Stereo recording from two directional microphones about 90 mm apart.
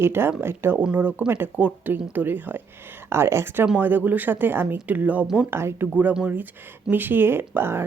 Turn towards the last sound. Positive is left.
turn(degrees=-25)  # may be behind; listen again after turning